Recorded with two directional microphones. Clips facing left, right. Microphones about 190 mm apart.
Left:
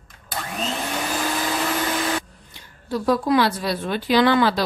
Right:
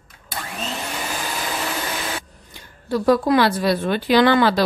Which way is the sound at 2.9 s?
65° right (ahead or behind).